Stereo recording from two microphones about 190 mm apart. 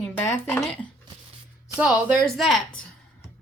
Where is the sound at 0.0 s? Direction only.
10° left (ahead or behind).